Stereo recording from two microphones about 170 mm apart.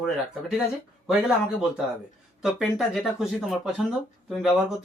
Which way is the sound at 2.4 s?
Centre (ahead or behind).